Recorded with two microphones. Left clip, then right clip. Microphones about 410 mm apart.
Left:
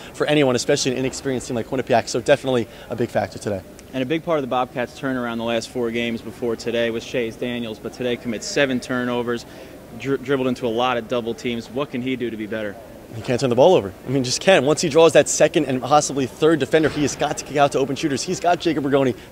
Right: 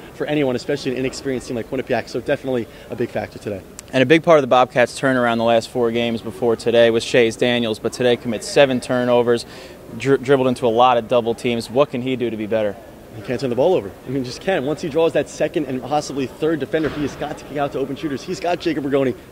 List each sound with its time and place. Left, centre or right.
0.2 s speech: left
3.9 s speech: right
13.3 s speech: left